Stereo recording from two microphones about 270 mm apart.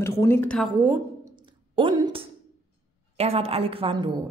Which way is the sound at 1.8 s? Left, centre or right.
Centre.